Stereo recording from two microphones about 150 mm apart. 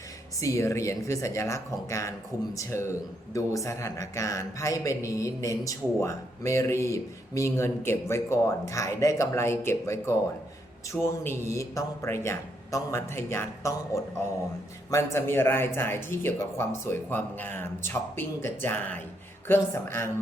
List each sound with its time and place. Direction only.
0.3 s a man's voice: 20° left (ahead or behind)